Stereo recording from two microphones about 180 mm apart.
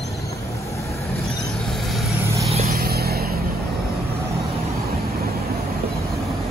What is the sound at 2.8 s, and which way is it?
Vehicle, 60° right (ahead or behind).